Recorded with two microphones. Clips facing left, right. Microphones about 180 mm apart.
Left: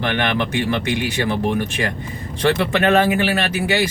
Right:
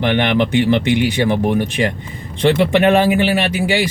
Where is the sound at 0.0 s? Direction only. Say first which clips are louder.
Right 5 dB; 20° right (ahead or behind).